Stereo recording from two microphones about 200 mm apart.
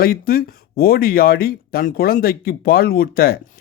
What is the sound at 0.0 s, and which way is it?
A man's voice, 45° left (ahead or behind).